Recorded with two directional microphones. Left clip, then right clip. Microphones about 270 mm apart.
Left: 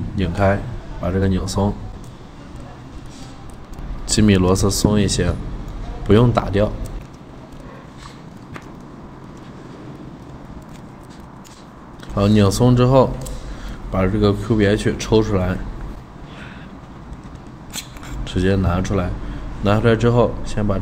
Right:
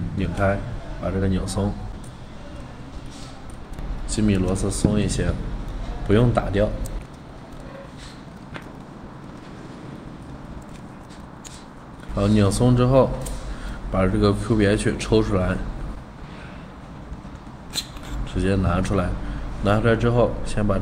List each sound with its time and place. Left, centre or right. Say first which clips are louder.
1.0 s speech: left 4 dB; centre
4.1 s speech: left 8 dB; left
12.2 s speech: left 4 dB; centre
18.2 s speech: left 4 dB; centre